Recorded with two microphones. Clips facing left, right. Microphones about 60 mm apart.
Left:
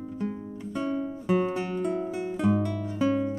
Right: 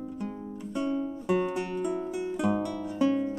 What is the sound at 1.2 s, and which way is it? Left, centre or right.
Music, left.